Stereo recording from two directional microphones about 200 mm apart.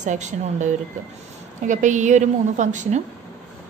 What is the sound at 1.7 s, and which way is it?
A woman's voice, 40° right (ahead or behind).